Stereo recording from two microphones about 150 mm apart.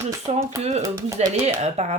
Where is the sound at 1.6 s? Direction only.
50° right (ahead or behind).